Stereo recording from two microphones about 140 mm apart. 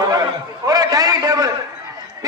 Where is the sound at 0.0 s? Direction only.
25° right (ahead or behind).